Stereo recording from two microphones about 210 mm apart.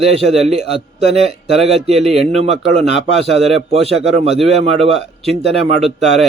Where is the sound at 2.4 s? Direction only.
30° right (ahead or behind).